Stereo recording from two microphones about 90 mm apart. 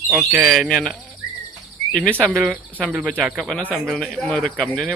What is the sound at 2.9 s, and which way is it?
Speech, 10° right (ahead or behind).